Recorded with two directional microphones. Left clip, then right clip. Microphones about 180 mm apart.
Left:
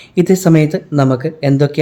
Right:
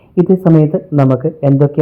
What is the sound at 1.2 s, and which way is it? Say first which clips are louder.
Speech: right 2 dB; centre (ahead or behind).